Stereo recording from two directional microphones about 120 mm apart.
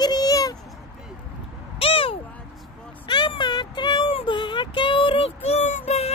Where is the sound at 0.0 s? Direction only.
35° left (ahead or behind).